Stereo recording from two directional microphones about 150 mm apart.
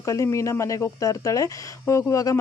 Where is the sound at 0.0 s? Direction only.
20° left (ahead or behind).